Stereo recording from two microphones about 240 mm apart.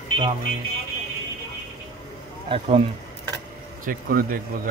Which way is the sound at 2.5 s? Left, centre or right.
Right.